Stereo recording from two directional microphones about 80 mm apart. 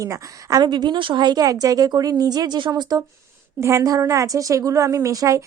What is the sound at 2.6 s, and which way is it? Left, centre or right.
Speech, right.